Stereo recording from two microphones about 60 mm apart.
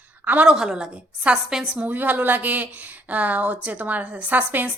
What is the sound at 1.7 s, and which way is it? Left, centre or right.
Speech, right.